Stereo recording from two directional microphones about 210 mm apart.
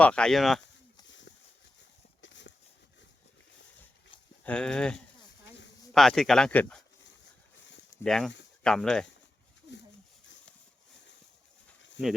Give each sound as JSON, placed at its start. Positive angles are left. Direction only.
{"t": 0.0, "sound": "speech", "side_deg": 5}
{"t": 2.2, "sound": "horse", "side_deg": 60}
{"t": 4.4, "sound": "speech", "side_deg": 5}
{"t": 8.0, "sound": "speech", "side_deg": 0}